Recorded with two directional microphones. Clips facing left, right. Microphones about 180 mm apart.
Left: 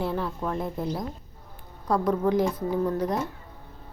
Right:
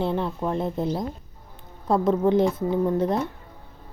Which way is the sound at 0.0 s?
25° right (ahead or behind).